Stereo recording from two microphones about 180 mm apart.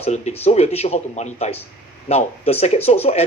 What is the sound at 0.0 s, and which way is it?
Speech, 35° left (ahead or behind).